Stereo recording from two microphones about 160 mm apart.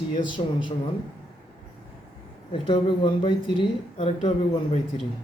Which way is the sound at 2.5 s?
35° left (ahead or behind).